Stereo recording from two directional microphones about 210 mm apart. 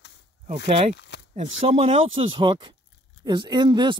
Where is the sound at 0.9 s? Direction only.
55° left (ahead or behind).